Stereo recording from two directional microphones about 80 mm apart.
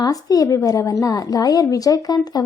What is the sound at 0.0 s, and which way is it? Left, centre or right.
A woman's voice, left.